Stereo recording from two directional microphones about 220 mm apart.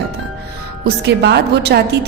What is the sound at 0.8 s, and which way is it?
Speech, 50° right (ahead or behind).